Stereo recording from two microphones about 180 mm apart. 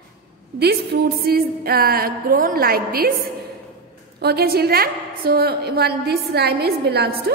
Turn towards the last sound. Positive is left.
turn(degrees=-65)  # may be behind; listen again after turning